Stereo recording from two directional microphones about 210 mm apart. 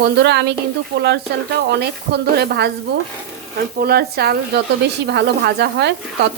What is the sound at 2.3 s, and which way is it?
Speech, 50° right (ahead or behind).